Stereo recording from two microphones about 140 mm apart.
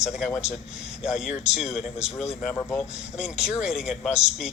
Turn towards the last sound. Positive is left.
turn(degrees=-5)  # may be behind; listen again after turning